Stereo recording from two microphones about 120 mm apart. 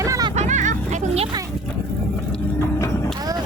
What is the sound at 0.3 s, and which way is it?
Vehicle, 90° right.